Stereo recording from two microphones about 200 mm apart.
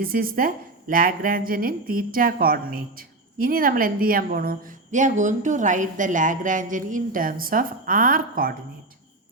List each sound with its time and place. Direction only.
0.0 s speech: 45° right (ahead or behind)